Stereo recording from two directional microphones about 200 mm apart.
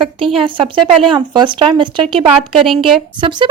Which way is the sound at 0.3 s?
25° right (ahead or behind).